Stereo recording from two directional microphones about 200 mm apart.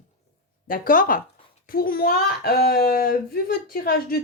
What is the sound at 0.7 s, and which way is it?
A child's voice, 45° left (ahead or behind).